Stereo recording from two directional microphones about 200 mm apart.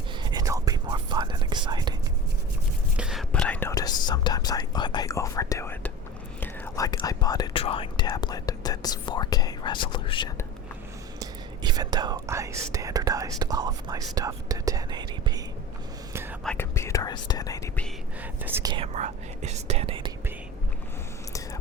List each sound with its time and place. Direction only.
0.3 s whispering: 20° right (ahead or behind)
3.0 s whispering: centre (ahead or behind); by 10.3 s 25° left (ahead or behind)
11.2 s whispering: 20° right (ahead or behind)
16.4 s whispering: 10° left (ahead or behind)
18.2 s whispering: 10° right (ahead or behind)
18.7 s whispering: 30° right (ahead or behind)